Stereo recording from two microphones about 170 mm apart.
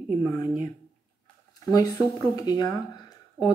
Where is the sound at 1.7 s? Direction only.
20° left (ahead or behind).